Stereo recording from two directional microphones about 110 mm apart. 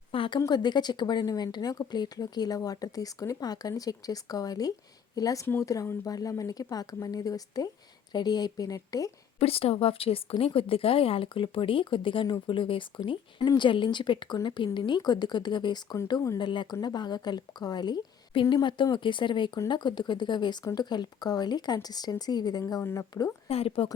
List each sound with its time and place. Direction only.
0.1 s a sound: 55° left (ahead or behind)
0.3 s speech: 35° left (ahead or behind)
9.4 s a woman's voice: 60° left (ahead or behind)
13.4 s speech: 40° left (ahead or behind)
22.6 s a woman's voice: 25° left (ahead or behind)
23.5 s a woman's voice: 60° left (ahead or behind)